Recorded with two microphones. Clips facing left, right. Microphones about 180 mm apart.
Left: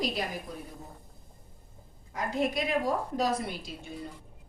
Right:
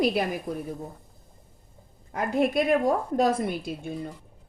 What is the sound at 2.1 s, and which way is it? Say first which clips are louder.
A woman's voice: right 6 dB; 55° right (ahead or behind).